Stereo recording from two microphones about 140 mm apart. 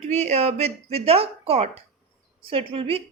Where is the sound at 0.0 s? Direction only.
55° right (ahead or behind).